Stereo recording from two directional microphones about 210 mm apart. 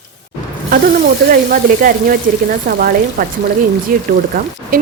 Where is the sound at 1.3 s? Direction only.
40° right (ahead or behind).